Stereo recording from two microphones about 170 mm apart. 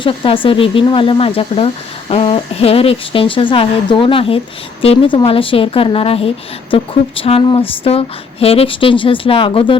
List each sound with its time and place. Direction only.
0.0 s speech: 30° left (ahead or behind)